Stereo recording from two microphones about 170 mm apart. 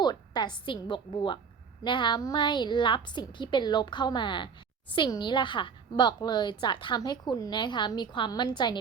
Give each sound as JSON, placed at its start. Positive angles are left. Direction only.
{"t": 0.0, "sound": "a woman's voice", "side_deg": 25}